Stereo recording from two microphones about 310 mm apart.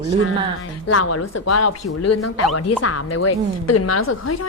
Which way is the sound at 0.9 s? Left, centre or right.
Left.